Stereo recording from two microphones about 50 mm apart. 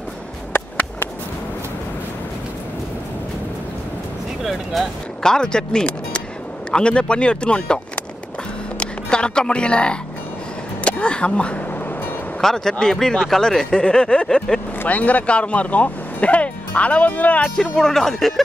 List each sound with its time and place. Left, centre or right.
4.7 s speech: centre
5.2 s speech: centre
12.4 s speech: centre
13.7 s speech: centre
14.9 s speech: left
17.6 s speech: centre